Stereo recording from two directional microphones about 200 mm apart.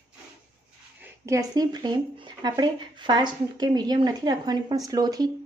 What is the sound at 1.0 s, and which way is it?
Speech, 15° right (ahead or behind).